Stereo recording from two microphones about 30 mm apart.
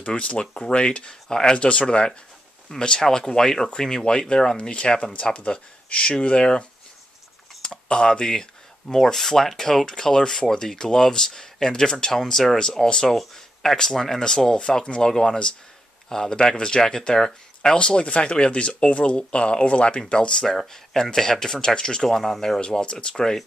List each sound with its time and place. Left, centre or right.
0.0 s speech: left
1.3 s speech: left
1.6 s speech: left
2.8 s speech: left
4.6 s speech: left
7.6 s speech: left
8.8 s speech: centre; by 20.4 s left
20.7 s speech: centre
22.6 s speech: left